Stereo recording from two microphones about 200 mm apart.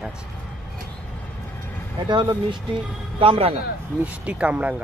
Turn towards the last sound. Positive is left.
turn(degrees=-5)  # may be behind; listen again after turning